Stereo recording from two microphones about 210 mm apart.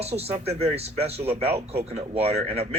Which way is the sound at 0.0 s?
30° right (ahead or behind).